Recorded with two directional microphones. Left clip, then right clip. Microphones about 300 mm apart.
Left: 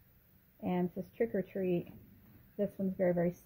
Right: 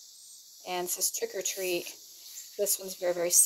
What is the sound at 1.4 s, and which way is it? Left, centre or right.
Speech, centre.